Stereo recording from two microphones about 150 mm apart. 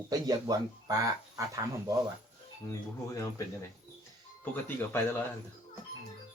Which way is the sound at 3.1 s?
20° left (ahead or behind).